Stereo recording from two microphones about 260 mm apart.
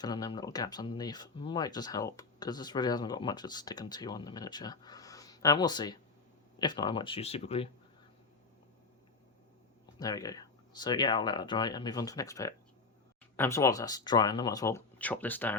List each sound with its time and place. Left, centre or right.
0.0 s speech: centre
10.0 s speech: centre